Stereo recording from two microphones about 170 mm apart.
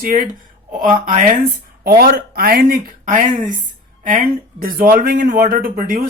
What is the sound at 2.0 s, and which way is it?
Speech, 60° right (ahead or behind).